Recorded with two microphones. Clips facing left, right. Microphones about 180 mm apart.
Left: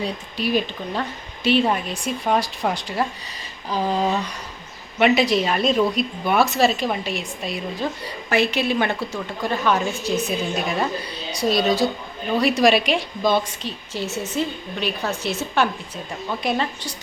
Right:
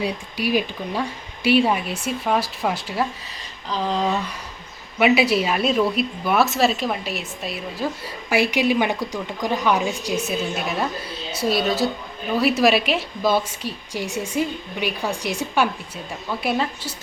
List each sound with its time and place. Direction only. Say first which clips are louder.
0.0 s a woman's voice: right 1 dB; 10° right (ahead or behind)
3.7 s a sound: left 1 dB; 10° left (ahead or behind)
4.9 s a woman's voice: even; 5° right (ahead or behind)